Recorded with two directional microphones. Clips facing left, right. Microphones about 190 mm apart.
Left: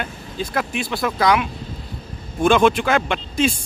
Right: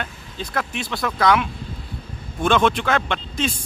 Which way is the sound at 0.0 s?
10° left (ahead or behind).